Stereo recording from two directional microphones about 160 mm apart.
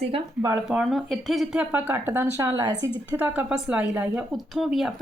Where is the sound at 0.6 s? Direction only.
Centre (ahead or behind).